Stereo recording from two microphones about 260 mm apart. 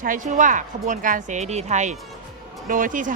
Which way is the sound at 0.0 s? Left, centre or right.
Right.